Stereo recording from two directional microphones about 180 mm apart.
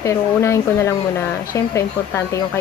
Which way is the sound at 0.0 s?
15° left (ahead or behind).